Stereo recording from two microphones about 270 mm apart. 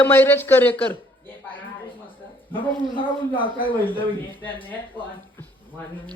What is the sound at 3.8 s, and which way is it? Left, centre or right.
Speech, centre.